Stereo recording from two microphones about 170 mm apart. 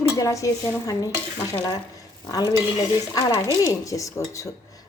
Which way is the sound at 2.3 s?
25° left (ahead or behind).